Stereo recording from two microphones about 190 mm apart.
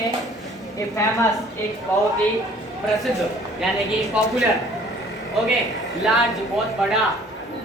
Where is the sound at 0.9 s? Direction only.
15° left (ahead or behind).